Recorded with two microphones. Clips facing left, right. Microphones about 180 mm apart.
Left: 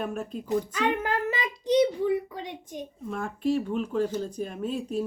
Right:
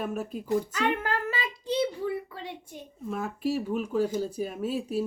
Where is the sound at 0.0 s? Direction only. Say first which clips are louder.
Even; 5° right (ahead or behind).